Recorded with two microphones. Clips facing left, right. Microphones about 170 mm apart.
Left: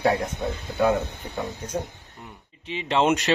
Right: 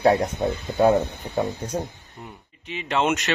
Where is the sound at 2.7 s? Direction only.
30° left (ahead or behind).